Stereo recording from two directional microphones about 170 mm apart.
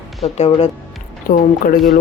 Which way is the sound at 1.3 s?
55° left (ahead or behind).